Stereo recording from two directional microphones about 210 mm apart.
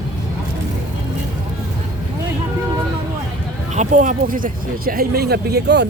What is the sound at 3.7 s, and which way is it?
Speech, 35° right (ahead or behind).